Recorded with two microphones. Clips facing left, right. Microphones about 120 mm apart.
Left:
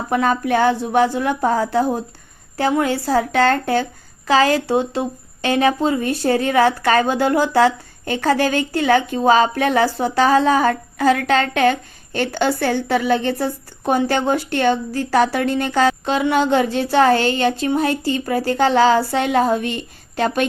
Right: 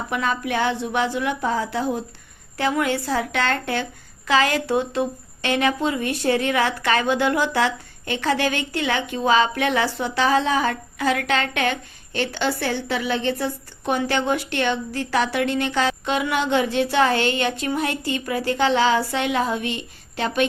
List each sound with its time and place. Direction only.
0.1 s a woman's voice: 40° left (ahead or behind)